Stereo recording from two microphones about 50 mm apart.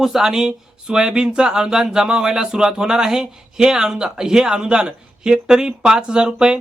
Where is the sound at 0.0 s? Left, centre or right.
Centre.